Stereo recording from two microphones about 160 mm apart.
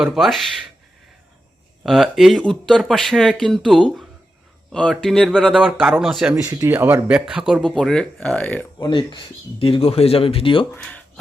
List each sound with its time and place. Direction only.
0.0 s speech: centre (ahead or behind)
1.8 s speech: centre (ahead or behind)
6.4 s speech: 20° right (ahead or behind); by 8.6 s 10° left (ahead or behind)
8.8 s speech: 30° left (ahead or behind)